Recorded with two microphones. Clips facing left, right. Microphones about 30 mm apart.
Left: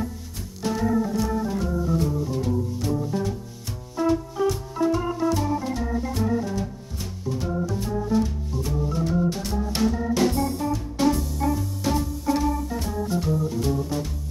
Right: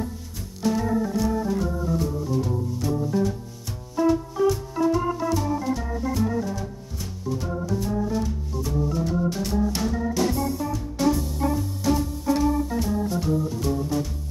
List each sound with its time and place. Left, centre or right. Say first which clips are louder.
0.6 s organ: even; centre
2.3 s music: even; centre
5.7 s organ: right 1 dB; centre
10.6 s music: left 2 dB; centre
11.2 s music: even; centre
11.8 s organ: right 2 dB; centre